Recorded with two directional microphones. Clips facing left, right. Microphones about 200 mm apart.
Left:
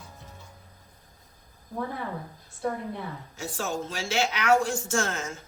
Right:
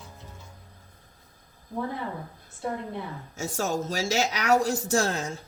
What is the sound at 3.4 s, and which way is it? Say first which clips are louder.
A woman's voice: right 3 dB; 45° right (ahead or behind).